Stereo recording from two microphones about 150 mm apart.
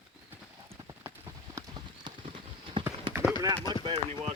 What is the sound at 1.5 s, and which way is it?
Clip-clop, 30° right (ahead or behind).